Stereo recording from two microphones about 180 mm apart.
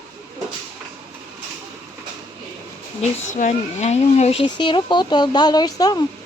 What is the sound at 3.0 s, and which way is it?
Speech, 45° left (ahead or behind).